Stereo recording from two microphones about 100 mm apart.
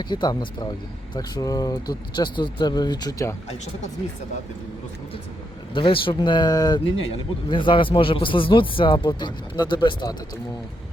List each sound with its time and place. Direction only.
0.0 s speech: 50° left (ahead or behind)
5.7 s speech: 60° left (ahead or behind); by 6.8 s 40° left (ahead or behind)
6.9 s a man's voice: 60° left (ahead or behind)